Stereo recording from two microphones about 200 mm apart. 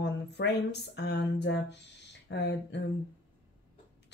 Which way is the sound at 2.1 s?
60° left (ahead or behind).